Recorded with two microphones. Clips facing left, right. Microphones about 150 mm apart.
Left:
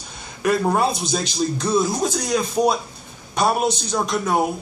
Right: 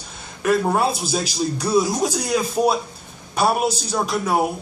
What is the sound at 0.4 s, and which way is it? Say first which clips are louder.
A man's voice: even; centre (ahead or behind).